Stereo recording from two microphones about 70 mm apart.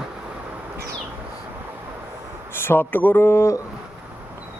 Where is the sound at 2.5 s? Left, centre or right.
Left.